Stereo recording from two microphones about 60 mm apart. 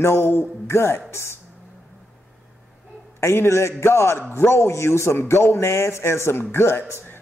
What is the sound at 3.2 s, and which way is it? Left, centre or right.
A man's voice, left.